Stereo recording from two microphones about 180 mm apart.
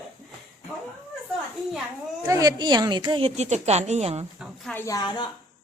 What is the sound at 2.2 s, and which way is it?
A woman's voice, 20° right (ahead or behind).